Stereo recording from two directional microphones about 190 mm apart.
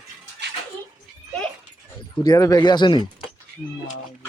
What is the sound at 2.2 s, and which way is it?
Speech, 20° left (ahead or behind).